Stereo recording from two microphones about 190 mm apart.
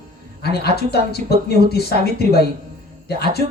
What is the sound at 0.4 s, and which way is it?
Speech, 55° left (ahead or behind).